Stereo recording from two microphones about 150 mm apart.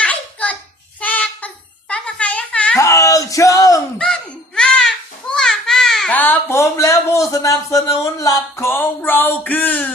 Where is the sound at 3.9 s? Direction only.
5° left (ahead or behind).